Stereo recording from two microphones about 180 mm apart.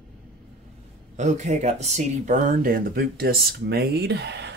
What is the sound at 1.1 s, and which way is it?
Speech, 40° right (ahead or behind).